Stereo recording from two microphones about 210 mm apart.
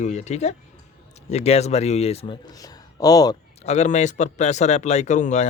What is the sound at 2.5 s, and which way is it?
Speech, 15° left (ahead or behind).